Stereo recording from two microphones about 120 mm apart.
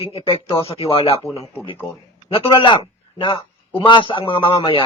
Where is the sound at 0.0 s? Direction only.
55° left (ahead or behind).